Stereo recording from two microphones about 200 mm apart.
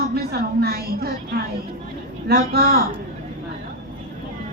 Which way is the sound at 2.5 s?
50° right (ahead or behind).